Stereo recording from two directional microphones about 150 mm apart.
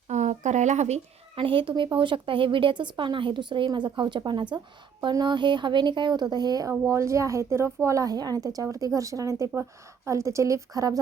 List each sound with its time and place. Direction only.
0.1 s speech: 50° right (ahead or behind); by 11.0 s 25° right (ahead or behind)